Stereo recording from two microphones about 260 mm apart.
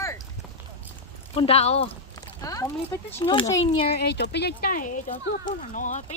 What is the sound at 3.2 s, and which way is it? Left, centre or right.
Speech, centre.